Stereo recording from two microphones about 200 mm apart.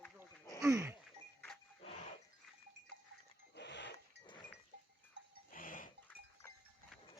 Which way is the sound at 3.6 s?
60° left (ahead or behind).